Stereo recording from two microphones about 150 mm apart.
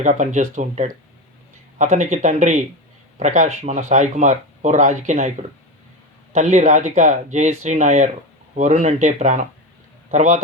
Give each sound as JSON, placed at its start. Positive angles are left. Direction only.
{"t": 0.0, "sound": "speech", "side_deg": -55}